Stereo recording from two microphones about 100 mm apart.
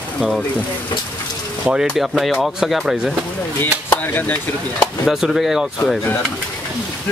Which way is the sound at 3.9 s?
20° left (ahead or behind).